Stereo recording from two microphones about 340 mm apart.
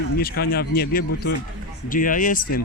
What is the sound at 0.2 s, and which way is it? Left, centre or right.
Speech, left.